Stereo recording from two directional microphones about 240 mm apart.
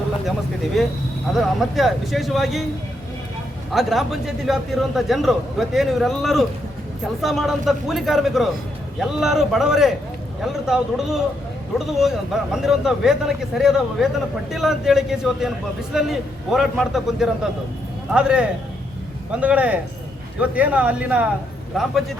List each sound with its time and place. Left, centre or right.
0.8 s a man's voice: centre
3.7 s a man's voice: centre